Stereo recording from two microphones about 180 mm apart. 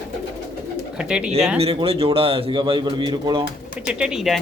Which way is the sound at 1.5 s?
35° right (ahead or behind).